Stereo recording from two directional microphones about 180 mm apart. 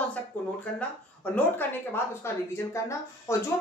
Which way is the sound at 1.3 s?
10° left (ahead or behind).